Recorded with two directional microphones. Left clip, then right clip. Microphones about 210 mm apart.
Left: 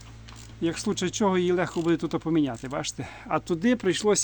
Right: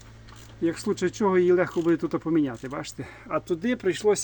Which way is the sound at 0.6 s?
10° left (ahead or behind).